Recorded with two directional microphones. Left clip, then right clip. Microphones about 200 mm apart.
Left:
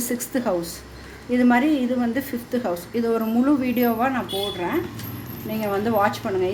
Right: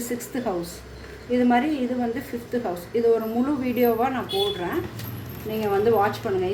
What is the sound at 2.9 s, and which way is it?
Speech, 40° left (ahead or behind).